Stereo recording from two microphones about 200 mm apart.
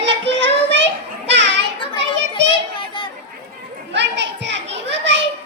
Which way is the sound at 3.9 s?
60° right (ahead or behind).